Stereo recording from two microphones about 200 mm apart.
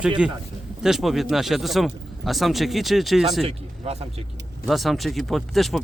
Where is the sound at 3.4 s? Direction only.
30° right (ahead or behind).